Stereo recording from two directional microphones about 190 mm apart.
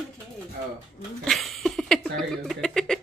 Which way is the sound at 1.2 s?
Centre (ahead or behind).